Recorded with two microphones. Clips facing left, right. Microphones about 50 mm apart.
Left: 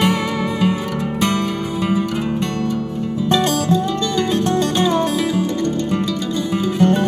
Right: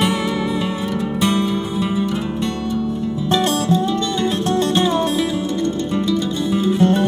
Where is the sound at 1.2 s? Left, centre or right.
Left.